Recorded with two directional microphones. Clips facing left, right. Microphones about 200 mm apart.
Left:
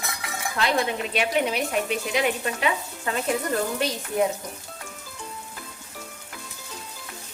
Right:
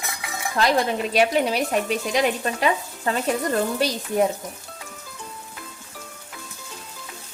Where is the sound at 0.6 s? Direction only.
40° right (ahead or behind).